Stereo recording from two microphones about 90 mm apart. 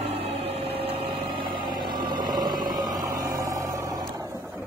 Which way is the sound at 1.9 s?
50° right (ahead or behind).